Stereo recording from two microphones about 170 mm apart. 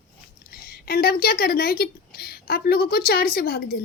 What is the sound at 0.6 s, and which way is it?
A woman's voice, 65° left (ahead or behind).